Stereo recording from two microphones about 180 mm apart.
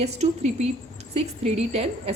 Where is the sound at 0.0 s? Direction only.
35° right (ahead or behind).